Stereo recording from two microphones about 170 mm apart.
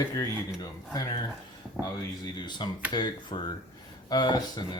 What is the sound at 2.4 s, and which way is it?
Speech, 25° left (ahead or behind).